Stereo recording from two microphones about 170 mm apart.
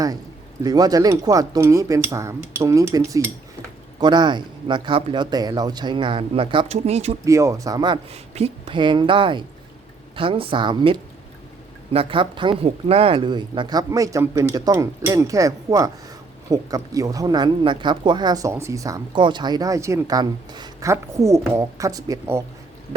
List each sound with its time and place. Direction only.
0.6 s speech: 20° right (ahead or behind); by 7.2 s 40° right (ahead or behind)
7.3 s speech: 20° right (ahead or behind)
8.1 s a woman's voice: 35° right (ahead or behind); by 22.4 s 20° right (ahead or behind)